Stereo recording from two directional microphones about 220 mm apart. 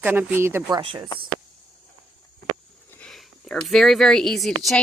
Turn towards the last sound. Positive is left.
turn(degrees=0)  # may be behind; listen again after turning